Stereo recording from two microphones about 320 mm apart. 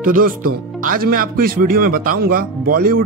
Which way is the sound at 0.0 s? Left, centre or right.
Right.